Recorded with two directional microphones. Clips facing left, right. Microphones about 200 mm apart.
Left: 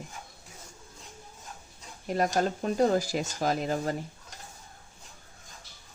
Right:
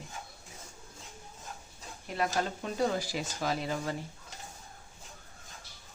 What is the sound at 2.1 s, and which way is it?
Speech, 40° left (ahead or behind).